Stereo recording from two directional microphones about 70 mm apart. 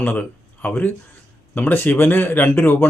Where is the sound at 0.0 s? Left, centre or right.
Left.